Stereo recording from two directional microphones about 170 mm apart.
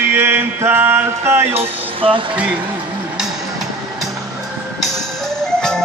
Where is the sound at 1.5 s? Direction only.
30° right (ahead or behind).